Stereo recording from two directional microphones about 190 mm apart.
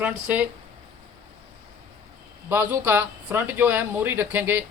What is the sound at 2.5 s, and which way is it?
Speech, 15° right (ahead or behind).